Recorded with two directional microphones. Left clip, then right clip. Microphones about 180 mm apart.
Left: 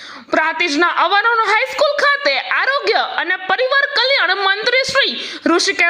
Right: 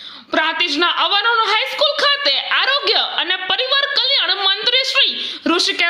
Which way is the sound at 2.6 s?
50° left (ahead or behind).